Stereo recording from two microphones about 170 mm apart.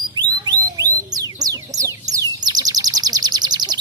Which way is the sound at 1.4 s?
20° right (ahead or behind).